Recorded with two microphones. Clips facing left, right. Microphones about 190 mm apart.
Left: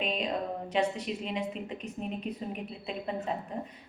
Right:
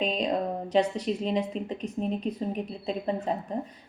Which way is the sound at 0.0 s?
35° right (ahead or behind).